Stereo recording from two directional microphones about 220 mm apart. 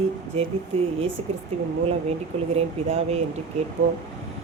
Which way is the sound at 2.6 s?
30° right (ahead or behind).